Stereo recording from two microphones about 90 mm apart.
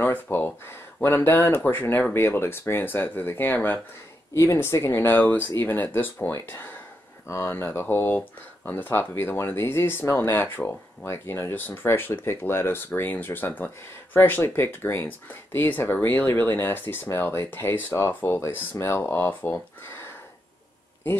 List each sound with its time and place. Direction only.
0.0 s speech: 20° left (ahead or behind)
4.3 s speech: 30° left (ahead or behind)